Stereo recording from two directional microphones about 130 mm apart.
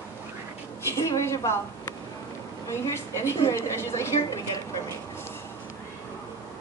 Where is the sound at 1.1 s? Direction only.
25° left (ahead or behind).